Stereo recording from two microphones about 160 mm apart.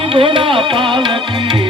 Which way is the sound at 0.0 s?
35° right (ahead or behind).